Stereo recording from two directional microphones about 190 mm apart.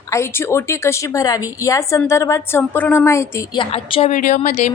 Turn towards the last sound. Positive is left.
turn(degrees=40)  # may be behind; listen again after turning